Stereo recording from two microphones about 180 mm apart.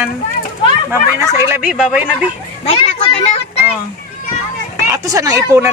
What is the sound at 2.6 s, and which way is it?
Speech, 30° left (ahead or behind).